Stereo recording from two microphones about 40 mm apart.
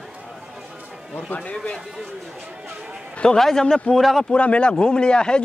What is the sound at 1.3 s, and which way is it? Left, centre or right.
Speech, left.